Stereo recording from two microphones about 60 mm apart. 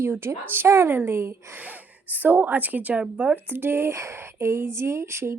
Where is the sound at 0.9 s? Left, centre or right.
Right.